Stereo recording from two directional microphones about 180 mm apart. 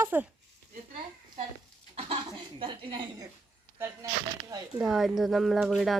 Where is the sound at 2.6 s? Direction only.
25° right (ahead or behind).